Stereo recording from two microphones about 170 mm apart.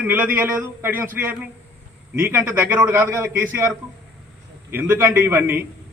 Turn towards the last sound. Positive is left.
turn(degrees=-15)  # may be behind; listen again after turning